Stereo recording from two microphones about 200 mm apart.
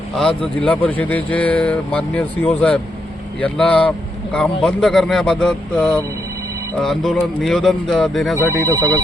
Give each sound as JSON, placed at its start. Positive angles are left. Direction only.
{"t": 0.2, "sound": "speech", "side_deg": 5}
{"t": 8.4, "sound": "speech", "side_deg": 10}
{"t": 8.7, "sound": "speech", "side_deg": -15}